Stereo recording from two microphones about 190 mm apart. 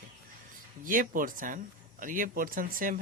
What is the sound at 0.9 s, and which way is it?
Speech, 45° right (ahead or behind).